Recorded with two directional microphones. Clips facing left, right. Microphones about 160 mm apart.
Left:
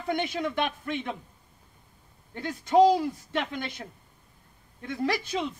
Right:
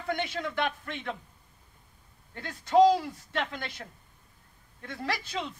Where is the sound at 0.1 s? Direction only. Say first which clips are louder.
Left 3 dB; 15° left (ahead or behind).